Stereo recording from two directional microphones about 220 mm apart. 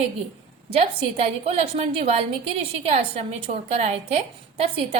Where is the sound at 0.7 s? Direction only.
25° right (ahead or behind).